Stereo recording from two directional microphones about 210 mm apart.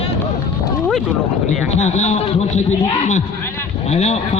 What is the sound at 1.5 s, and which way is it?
A man's voice, 35° left (ahead or behind).